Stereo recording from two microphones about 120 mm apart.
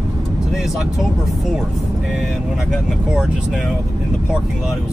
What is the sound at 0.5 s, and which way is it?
Speech, 5° right (ahead or behind).